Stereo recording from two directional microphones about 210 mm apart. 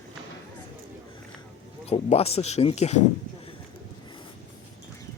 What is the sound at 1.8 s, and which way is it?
Speech, 30° left (ahead or behind).